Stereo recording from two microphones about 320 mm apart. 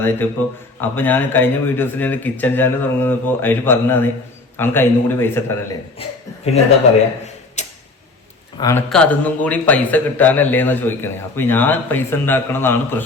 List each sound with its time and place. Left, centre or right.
0.2 s a man's voice: centre
6.0 s speech: centre
7.6 s tick-tock: left
8.6 s a man's voice: centre